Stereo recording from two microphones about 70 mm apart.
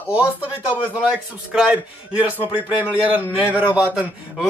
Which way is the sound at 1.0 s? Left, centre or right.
Centre.